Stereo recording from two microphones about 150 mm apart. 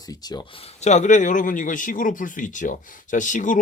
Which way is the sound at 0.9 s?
55° left (ahead or behind).